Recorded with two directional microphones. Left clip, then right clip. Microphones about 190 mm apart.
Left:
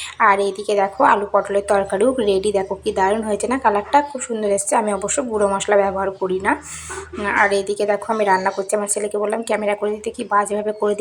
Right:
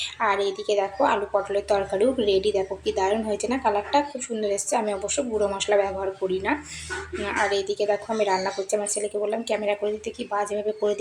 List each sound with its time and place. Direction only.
0.2 s a woman's voice: 20° left (ahead or behind)